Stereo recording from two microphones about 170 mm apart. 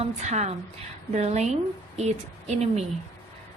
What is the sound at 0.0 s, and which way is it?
A woman's voice, 40° right (ahead or behind).